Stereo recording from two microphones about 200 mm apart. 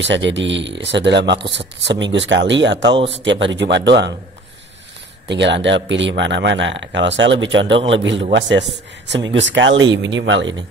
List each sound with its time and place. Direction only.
0.0 s speech: 65° right (ahead or behind)
2.9 s speech: 25° right (ahead or behind)
3.3 s speech: 65° right (ahead or behind)
5.3 s speech: 60° right (ahead or behind)